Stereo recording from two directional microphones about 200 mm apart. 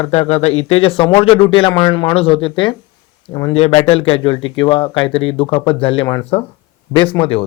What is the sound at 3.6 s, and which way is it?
A man's voice, 30° left (ahead or behind).